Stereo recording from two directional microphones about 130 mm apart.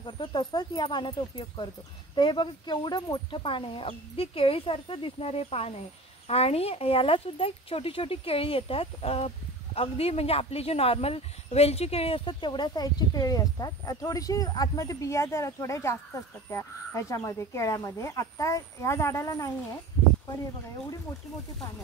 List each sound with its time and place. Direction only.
0.0 s speech: 35° left (ahead or behind)